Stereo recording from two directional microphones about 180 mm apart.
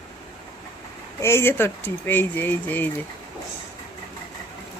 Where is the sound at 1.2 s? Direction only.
15° left (ahead or behind).